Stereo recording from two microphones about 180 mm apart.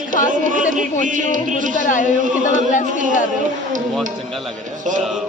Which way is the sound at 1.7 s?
45° left (ahead or behind).